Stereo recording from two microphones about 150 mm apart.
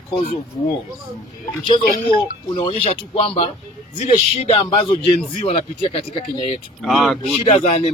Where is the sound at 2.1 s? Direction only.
35° left (ahead or behind).